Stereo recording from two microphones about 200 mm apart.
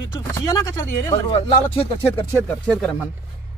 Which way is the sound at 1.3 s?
30° left (ahead or behind).